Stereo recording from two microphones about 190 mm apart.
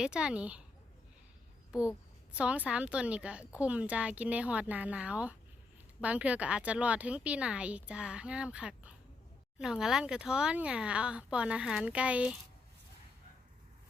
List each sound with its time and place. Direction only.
0.0 s speech: 5° right (ahead or behind)
2.3 s speech: 5° right (ahead or behind)